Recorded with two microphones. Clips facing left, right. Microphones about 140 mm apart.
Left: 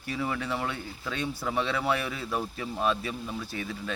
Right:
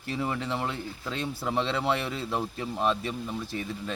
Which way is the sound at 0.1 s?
25° right (ahead or behind).